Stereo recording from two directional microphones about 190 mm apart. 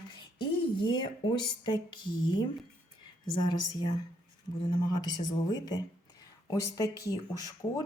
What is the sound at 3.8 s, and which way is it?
Speech, 20° left (ahead or behind).